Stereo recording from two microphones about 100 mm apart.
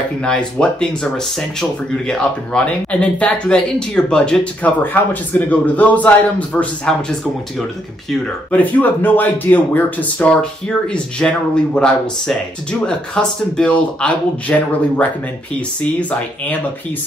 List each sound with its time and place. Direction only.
0.2 s speech: 10° left (ahead or behind)
8.5 s speech: 15° left (ahead or behind)